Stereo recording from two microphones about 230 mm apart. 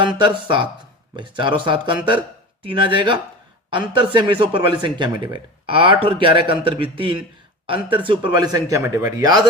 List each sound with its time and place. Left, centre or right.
0.0 s speech: centre